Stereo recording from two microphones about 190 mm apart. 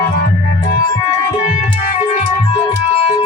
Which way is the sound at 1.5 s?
30° left (ahead or behind).